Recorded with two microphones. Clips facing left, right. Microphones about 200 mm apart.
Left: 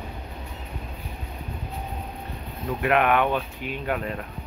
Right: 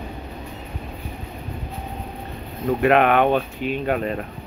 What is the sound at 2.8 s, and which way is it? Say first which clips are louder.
Speech: right 5 dB; 30° right (ahead or behind).